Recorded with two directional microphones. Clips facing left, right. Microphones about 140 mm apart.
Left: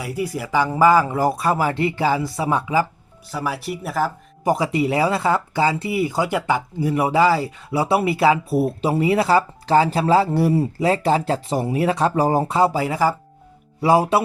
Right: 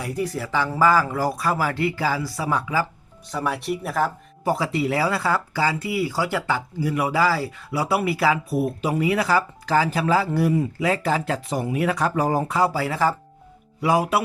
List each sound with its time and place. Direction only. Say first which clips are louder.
0.0 s speech: left 1 dB; 10° left (ahead or behind)
3.3 s speech: even; centre (ahead or behind)
4.4 s speech: left 3 dB; 15° left (ahead or behind)